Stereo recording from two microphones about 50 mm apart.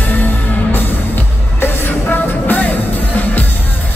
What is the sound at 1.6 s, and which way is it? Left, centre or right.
Music, left.